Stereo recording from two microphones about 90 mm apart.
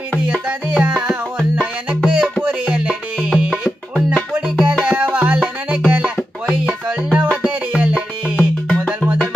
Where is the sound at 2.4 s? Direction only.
15° right (ahead or behind).